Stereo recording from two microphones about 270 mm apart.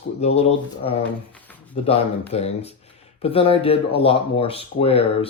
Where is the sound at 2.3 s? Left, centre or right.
Left.